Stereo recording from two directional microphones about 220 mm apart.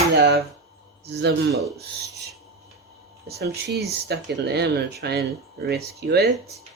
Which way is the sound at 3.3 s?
50° right (ahead or behind).